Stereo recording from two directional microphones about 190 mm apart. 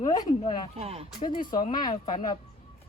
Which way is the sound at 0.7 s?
30° right (ahead or behind).